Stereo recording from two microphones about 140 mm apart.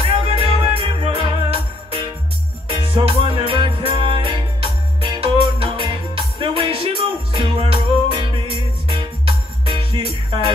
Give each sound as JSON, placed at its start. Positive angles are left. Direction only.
{"t": 0.0, "sound": "music", "side_deg": -40}